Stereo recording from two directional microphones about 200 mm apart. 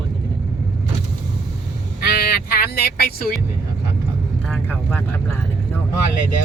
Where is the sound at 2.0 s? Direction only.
50° left (ahead or behind).